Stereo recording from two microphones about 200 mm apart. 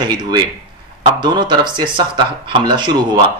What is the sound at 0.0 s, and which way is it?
A man's voice, 20° right (ahead or behind).